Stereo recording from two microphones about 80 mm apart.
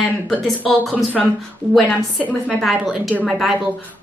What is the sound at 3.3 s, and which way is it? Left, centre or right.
Speech, centre.